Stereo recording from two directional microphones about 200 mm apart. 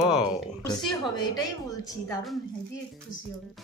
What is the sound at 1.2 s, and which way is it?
Speech, 20° left (ahead or behind).